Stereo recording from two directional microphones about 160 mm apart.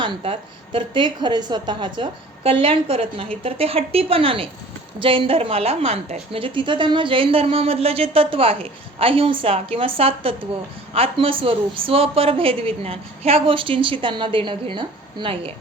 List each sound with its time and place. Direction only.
0.0 s a woman's voice: 30° right (ahead or behind)